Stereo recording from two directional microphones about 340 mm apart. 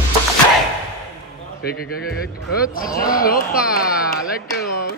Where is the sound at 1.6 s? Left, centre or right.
Left.